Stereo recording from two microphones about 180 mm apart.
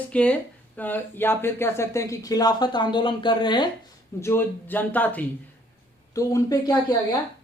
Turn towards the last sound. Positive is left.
turn(degrees=20)  # may be behind; listen again after turning